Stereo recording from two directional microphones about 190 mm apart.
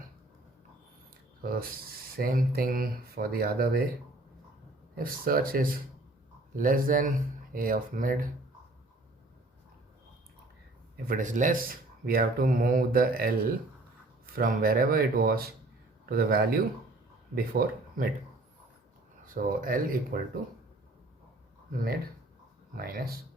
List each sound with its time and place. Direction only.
1.4 s mechanisms: 50° right (ahead or behind)
2.1 s speech: 50° right (ahead or behind)
4.9 s speech: 50° right (ahead or behind)
10.9 s speech: 45° right (ahead or behind)
19.2 s speech: 50° right (ahead or behind)
22.8 s speech: 50° right (ahead or behind)